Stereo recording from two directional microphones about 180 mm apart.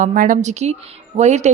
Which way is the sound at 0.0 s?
45° right (ahead or behind).